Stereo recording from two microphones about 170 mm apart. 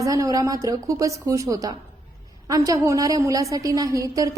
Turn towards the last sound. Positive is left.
turn(degrees=-20)  # may be behind; listen again after turning